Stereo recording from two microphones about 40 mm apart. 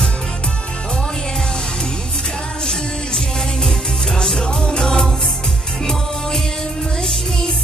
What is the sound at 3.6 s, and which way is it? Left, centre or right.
Music, centre.